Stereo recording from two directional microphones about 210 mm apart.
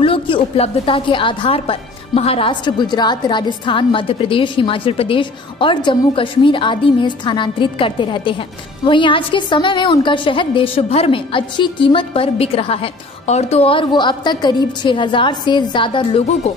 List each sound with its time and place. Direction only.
0.0 s a woman's voice: 25° left (ahead or behind)